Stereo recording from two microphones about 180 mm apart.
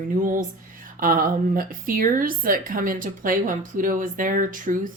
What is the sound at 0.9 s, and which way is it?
Speech, 50° right (ahead or behind).